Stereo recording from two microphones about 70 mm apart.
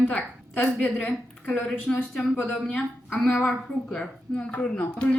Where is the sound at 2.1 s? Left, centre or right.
Centre.